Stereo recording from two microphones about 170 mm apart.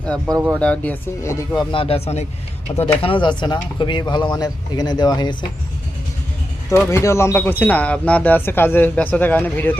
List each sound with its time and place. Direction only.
0.6 s speech: 10° left (ahead or behind)
1.7 s speech: 35° left (ahead or behind)
6.7 s speech: 15° left (ahead or behind)